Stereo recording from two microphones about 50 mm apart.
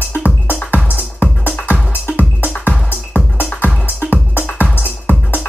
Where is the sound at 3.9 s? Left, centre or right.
Left.